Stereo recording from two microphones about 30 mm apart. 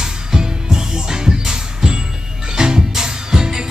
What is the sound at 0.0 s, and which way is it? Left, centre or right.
Music, right.